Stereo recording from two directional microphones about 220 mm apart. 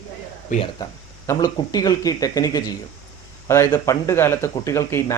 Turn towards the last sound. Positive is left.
turn(degrees=10)  # may be behind; listen again after turning